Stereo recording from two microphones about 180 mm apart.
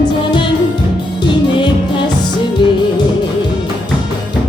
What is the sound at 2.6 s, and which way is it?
Music, 25° left (ahead or behind).